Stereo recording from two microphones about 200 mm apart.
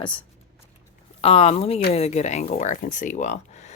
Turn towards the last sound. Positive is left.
turn(degrees=35)  # may be behind; listen again after turning